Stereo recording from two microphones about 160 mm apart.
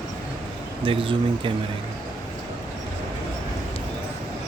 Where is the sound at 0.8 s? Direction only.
30° right (ahead or behind).